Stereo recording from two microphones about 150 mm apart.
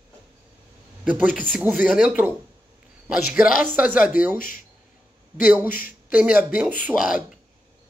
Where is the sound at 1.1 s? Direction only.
10° right (ahead or behind).